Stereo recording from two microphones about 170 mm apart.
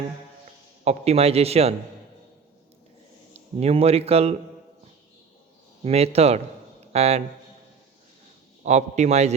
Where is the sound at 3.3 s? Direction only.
35° right (ahead or behind).